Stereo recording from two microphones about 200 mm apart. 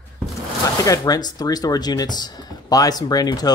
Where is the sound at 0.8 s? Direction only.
15° left (ahead or behind).